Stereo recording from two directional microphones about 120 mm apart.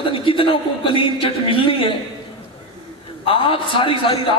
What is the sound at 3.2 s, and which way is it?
Speech, 45° left (ahead or behind).